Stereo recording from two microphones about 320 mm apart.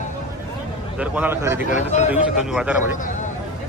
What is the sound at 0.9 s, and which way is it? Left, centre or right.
Speech, centre.